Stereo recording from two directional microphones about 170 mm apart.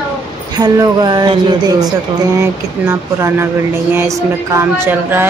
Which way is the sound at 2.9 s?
15° right (ahead or behind).